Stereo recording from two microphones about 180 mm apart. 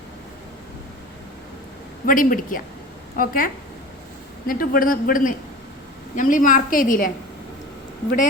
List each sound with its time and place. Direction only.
2.0 s a woman's voice: 50° left (ahead or behind)